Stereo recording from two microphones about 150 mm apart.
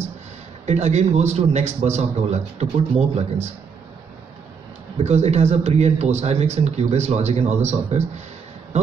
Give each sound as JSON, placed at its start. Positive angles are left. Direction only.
{"t": 0.7, "sound": "speech", "side_deg": -45}
{"t": 5.0, "sound": "speech", "side_deg": -45}